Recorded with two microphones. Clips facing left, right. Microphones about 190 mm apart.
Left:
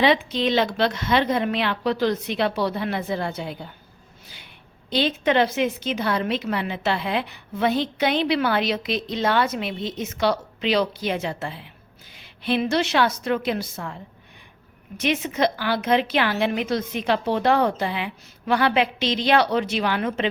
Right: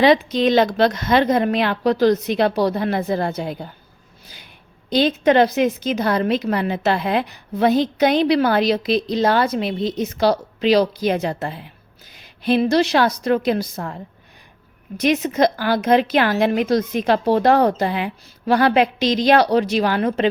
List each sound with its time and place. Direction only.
0.0 s a woman's voice: 40° right (ahead or behind)
4.9 s a woman's voice: 40° right (ahead or behind)